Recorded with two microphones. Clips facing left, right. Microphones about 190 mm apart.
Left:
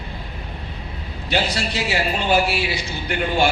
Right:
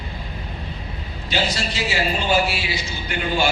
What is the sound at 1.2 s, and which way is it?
A man's voice, 60° left (ahead or behind).